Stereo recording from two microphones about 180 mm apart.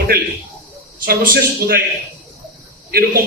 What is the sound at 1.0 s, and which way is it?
Speech, 55° right (ahead or behind).